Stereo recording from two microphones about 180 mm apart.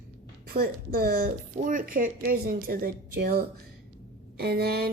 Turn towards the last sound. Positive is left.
turn(degrees=-60)  # may be behind; listen again after turning